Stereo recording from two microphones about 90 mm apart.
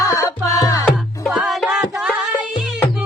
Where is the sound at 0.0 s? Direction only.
35° left (ahead or behind).